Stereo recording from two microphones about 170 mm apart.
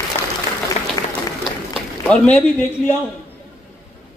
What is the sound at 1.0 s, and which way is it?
Applause, 20° left (ahead or behind).